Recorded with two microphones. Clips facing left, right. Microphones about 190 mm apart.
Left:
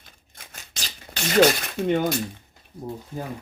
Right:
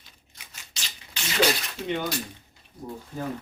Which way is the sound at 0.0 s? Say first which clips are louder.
Left 4 dB; 50° left (ahead or behind).